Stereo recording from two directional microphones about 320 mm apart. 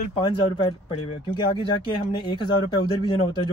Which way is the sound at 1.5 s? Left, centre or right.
Centre.